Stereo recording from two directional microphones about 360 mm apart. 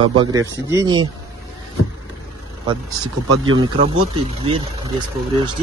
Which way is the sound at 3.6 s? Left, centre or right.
Centre.